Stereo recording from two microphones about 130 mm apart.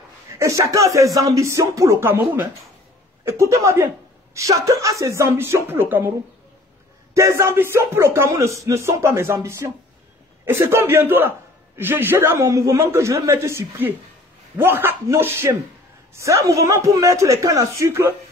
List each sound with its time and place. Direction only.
0.3 s a man's voice: 20° right (ahead or behind)
7.2 s a man's voice: 20° right (ahead or behind)